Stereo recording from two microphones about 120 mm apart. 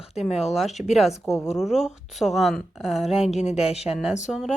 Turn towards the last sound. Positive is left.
turn(degrees=0)  # may be behind; listen again after turning